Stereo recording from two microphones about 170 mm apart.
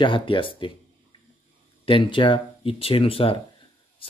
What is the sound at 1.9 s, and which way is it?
Speech, 30° left (ahead or behind).